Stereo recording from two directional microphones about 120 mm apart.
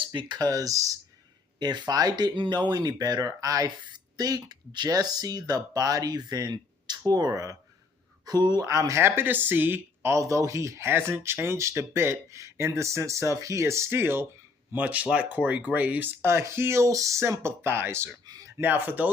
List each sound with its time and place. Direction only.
0.0 s speech: 40° right (ahead or behind); by 19.1 s 15° right (ahead or behind)